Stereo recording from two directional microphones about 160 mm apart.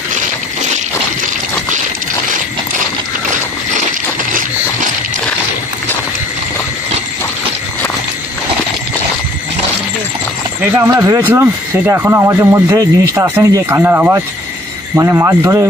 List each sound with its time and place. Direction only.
10.9 s speech: 20° right (ahead or behind)